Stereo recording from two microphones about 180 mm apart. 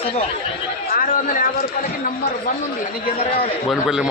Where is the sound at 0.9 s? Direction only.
50° left (ahead or behind).